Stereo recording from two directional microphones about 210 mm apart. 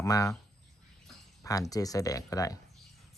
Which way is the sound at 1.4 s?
15° left (ahead or behind).